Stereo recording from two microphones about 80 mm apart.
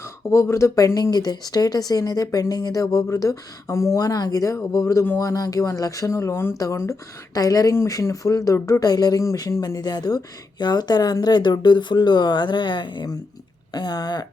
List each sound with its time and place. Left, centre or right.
0.0 s speech: left
1.1 s speech: left
7.3 s speech: left
8.8 s speech: left
9.2 s speech: left
13.7 s speech: left